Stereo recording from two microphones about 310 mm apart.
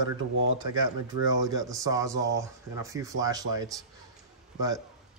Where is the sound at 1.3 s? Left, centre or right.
Centre.